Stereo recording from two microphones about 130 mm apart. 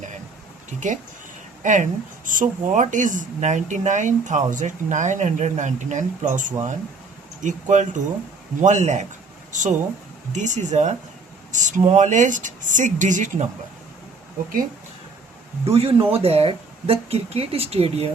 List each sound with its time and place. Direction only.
1.6 s speech: 75° right (ahead or behind)
15.6 s speech: 50° right (ahead or behind)